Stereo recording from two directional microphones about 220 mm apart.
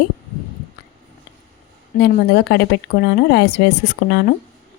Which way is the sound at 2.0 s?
50° left (ahead or behind).